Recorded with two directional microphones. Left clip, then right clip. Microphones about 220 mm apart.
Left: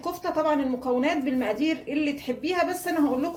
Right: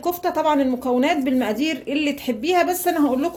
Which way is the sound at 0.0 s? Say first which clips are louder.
Right 5 dB; 45° right (ahead or behind).